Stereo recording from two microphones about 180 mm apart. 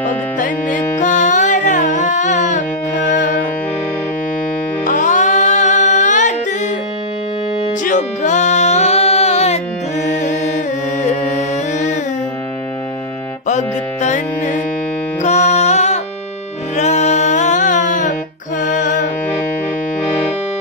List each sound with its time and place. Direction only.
0.4 s music: 45° left (ahead or behind)
4.8 s music: 45° left (ahead or behind)
7.8 s music: 45° left (ahead or behind)
11.0 s music: 40° left (ahead or behind)
13.5 s music: 40° left (ahead or behind)